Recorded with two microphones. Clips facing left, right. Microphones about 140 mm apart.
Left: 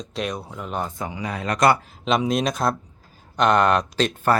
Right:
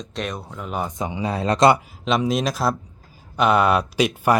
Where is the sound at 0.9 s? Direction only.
20° right (ahead or behind).